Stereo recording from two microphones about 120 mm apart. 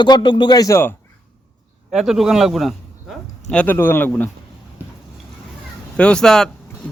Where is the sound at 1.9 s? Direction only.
5° right (ahead or behind).